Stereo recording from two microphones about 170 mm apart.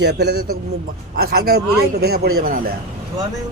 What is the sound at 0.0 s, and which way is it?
A man's voice, 80° right.